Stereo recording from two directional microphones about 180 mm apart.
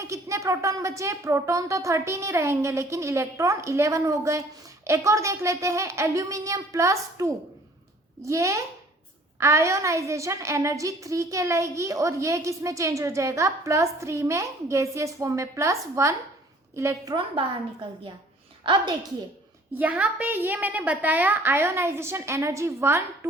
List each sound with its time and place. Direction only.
0.0 s a woman's voice: 15° right (ahead or behind)
19.7 s a woman's voice: 10° right (ahead or behind)